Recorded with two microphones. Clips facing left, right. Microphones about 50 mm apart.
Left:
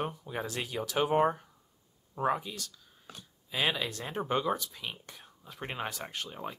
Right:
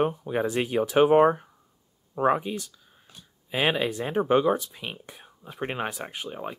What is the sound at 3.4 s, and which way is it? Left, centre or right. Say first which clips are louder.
Speech: right 7 dB; right.